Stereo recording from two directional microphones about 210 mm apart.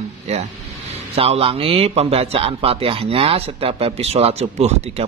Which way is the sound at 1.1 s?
25° right (ahead or behind).